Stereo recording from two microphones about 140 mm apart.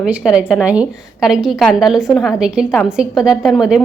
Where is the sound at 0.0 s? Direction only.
5° right (ahead or behind).